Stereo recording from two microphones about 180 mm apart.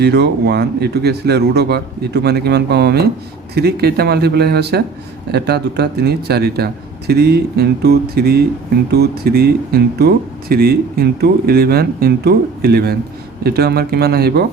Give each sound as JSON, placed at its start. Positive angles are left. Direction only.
{"t": 0.0, "sound": "speech", "side_deg": -65}